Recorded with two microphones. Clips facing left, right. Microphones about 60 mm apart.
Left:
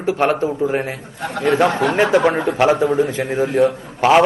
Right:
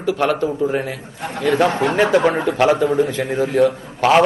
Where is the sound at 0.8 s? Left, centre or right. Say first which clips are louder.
Left 1 dB; left.